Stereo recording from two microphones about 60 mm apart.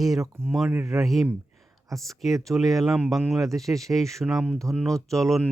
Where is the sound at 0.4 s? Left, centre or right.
Right.